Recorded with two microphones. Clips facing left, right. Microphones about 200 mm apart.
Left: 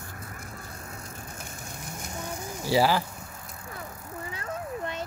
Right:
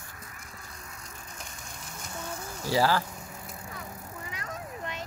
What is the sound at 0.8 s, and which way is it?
Vehicle, 50° left (ahead or behind).